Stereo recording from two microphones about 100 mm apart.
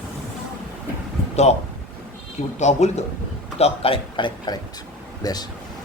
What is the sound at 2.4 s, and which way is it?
Speech, 90° left.